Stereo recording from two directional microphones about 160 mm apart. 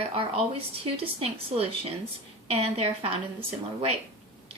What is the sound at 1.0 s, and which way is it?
A woman's voice, 40° right (ahead or behind).